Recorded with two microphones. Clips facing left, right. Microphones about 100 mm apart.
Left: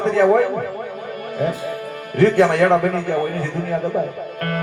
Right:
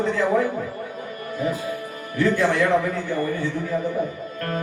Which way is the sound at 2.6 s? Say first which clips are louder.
Left 5 dB; 90° left.